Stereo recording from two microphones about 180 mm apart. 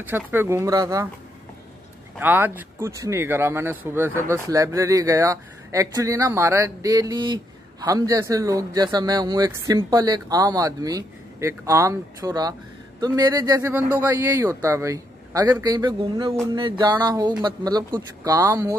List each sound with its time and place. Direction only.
0.0 s speech: 10° right (ahead or behind)
2.1 s speech: 10° right (ahead or behind)